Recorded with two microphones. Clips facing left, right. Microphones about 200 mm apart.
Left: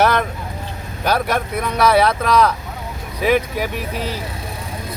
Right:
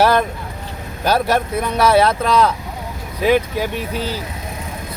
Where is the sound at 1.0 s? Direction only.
30° right (ahead or behind).